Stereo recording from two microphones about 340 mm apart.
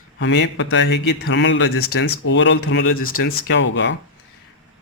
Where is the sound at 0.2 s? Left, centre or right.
Left.